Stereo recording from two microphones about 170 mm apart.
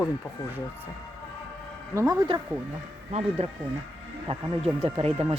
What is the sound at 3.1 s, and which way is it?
Speech, 40° right (ahead or behind).